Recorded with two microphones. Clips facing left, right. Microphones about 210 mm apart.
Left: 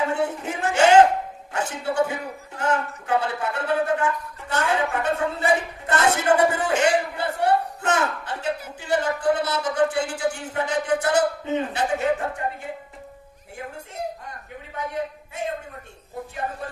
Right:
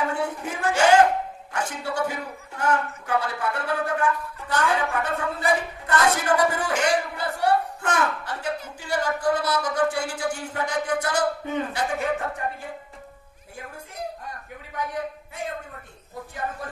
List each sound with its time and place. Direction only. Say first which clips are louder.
0.0 s a woman's voice: left 2 dB; 25° left (ahead or behind)